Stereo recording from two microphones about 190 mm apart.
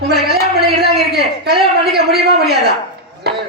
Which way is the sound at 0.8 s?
55° right (ahead or behind).